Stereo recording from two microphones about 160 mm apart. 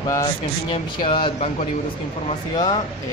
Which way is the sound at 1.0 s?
30° left (ahead or behind).